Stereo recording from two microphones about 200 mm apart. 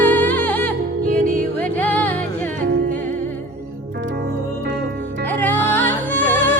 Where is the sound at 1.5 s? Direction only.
10° left (ahead or behind).